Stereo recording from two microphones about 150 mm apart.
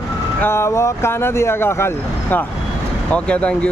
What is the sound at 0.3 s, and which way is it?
Speech, 15° left (ahead or behind).